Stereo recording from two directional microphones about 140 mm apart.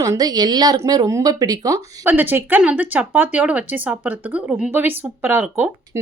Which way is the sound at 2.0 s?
15° right (ahead or behind).